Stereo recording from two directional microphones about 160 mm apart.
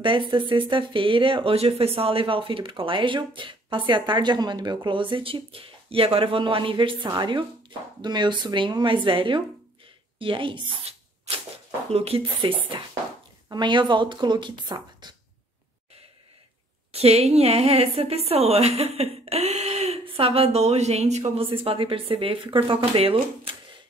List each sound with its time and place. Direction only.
0.0 s speech: 30° right (ahead or behind)
16.9 s speech: 40° right (ahead or behind)
21.2 s speech: 35° right (ahead or behind)